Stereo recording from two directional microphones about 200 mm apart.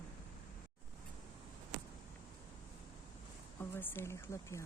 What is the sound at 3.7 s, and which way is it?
Speech, 10° left (ahead or behind).